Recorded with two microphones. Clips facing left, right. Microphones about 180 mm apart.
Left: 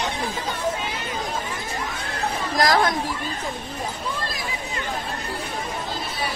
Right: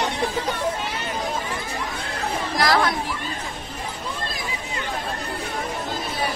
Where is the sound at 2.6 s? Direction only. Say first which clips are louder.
Left 1 dB; 45° left (ahead or behind).